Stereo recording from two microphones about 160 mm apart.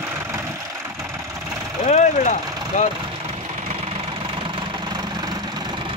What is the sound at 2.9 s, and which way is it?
Engine knocking, 35° right (ahead or behind).